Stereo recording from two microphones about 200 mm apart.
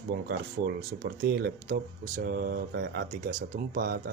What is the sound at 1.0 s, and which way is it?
Speech, 50° right (ahead or behind).